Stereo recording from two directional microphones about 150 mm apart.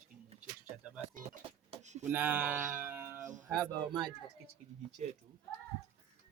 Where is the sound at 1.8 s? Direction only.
50° right (ahead or behind).